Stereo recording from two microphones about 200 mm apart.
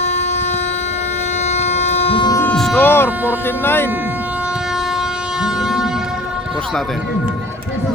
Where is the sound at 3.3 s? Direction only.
10° left (ahead or behind).